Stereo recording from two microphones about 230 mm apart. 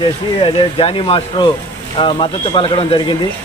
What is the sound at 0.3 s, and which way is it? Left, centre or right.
Speech, left.